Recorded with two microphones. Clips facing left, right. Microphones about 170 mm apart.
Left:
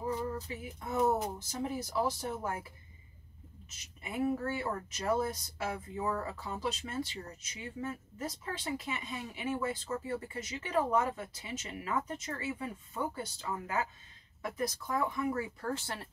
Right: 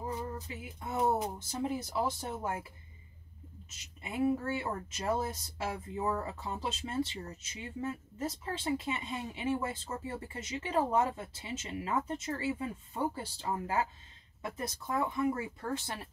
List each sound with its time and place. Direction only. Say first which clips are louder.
0.5 s speech: left 1 dB; 25° right (ahead or behind)
4.0 s speech: right 2 dB; 25° right (ahead or behind)